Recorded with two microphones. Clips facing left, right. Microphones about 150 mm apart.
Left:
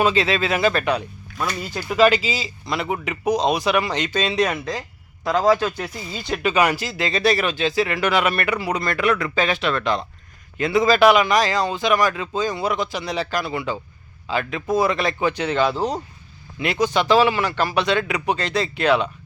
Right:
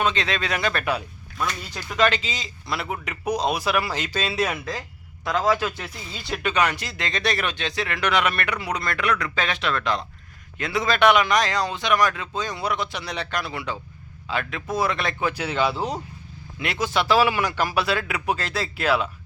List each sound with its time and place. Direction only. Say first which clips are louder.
0.0 s speech: left 5 dB; 5° left (ahead or behind)